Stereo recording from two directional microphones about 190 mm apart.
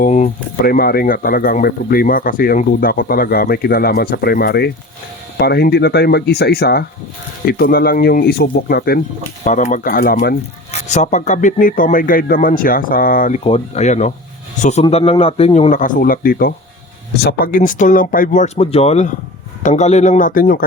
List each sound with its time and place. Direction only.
0.0 s speech: 45° left (ahead or behind)
9.4 s speech: 40° left (ahead or behind); by 10.3 s 55° left (ahead or behind)
10.7 s speech: 35° left (ahead or behind)